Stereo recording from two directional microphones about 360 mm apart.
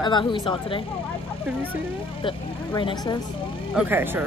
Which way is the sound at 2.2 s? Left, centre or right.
Centre.